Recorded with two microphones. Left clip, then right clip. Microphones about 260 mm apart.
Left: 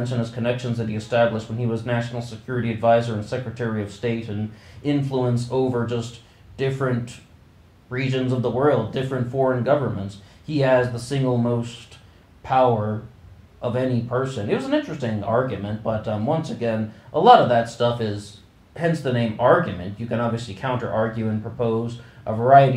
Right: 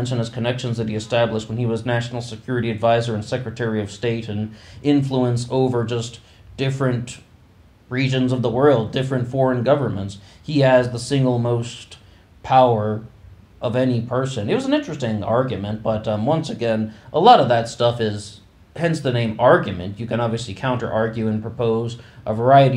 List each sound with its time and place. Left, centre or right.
0.0 s speech: right
7.9 s speech: right